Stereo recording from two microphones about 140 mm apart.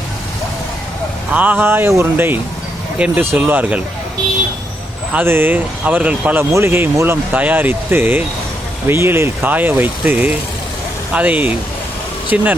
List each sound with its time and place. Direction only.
1.3 s speech: 10° right (ahead or behind)
5.1 s speech: 15° right (ahead or behind)